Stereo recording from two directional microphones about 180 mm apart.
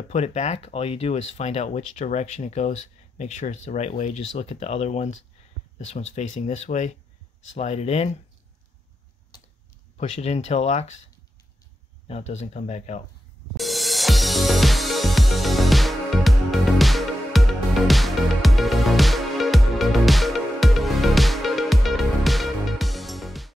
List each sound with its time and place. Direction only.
0.1 s speech: 40° left (ahead or behind)
9.9 s speech: 40° left (ahead or behind)
12.1 s speech: 35° left (ahead or behind)
13.6 s music: centre (ahead or behind)